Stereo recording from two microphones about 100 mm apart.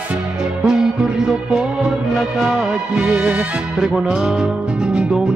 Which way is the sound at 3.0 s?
15° right (ahead or behind).